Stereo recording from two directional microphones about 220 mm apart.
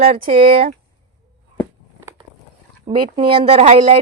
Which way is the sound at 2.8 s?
20° right (ahead or behind).